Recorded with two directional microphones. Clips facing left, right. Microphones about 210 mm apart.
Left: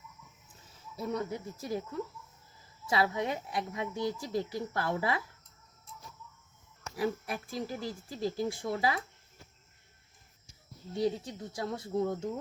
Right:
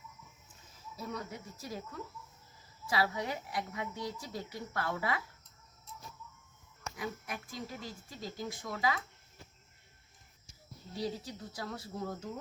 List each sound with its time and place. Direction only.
0.9 s speech: 25° left (ahead or behind)
2.9 s speech: 25° left (ahead or behind)
6.9 s speech: 30° left (ahead or behind)
10.9 s speech: 25° left (ahead or behind)